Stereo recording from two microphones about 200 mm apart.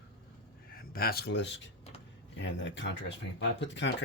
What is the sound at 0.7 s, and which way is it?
Speech, 45° left (ahead or behind).